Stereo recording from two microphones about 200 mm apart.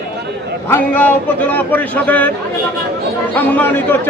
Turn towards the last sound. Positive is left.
turn(degrees=10)  # may be behind; listen again after turning